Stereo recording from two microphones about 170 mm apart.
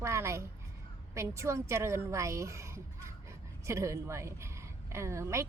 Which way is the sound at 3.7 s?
15° right (ahead or behind).